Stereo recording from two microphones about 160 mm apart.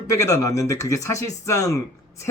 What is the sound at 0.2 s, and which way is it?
Speech, 20° left (ahead or behind).